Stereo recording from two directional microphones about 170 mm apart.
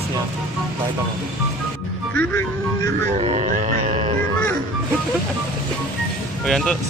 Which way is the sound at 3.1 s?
35° right (ahead or behind).